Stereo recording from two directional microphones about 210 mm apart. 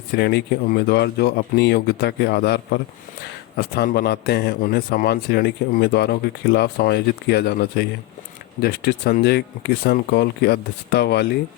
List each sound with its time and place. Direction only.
0.1 s speech: 50° left (ahead or behind)